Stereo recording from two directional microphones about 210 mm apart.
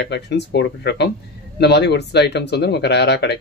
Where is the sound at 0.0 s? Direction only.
55° left (ahead or behind).